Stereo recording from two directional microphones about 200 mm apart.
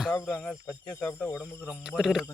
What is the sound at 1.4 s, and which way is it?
Speech, 5° right (ahead or behind).